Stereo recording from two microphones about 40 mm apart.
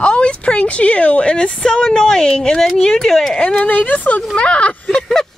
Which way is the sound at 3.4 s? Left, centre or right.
Left.